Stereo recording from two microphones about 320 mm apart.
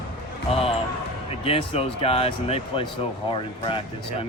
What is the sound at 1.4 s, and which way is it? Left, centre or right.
Speech, centre.